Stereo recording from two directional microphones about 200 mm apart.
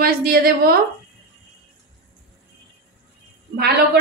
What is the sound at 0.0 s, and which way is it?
Speech, 50° right (ahead or behind).